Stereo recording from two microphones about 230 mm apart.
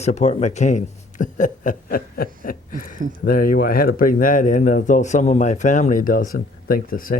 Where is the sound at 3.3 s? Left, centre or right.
Left.